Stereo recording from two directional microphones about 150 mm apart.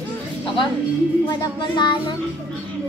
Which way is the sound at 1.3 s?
25° left (ahead or behind).